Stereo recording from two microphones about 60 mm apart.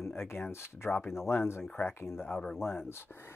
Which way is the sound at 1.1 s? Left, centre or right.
Left.